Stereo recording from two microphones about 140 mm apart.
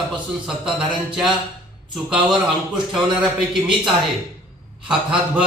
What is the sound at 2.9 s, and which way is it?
Speech, 5° right (ahead or behind).